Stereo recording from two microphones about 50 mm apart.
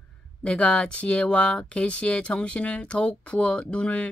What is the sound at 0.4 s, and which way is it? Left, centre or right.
Speech, left.